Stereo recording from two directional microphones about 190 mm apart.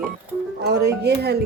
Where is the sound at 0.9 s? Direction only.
60° right (ahead or behind).